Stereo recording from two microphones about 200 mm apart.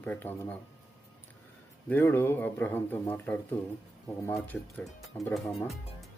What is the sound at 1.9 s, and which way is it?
Speech, 10° left (ahead or behind).